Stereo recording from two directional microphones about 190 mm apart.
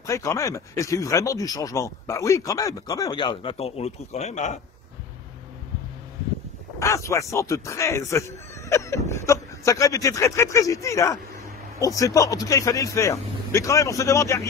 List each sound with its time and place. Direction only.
0.0 s speech: 15° left (ahead or behind); by 4.6 s 35° left (ahead or behind)
6.8 s speech: 15° left (ahead or behind)